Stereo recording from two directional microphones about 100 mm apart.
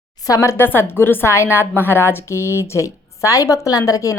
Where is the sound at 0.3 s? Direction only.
30° left (ahead or behind).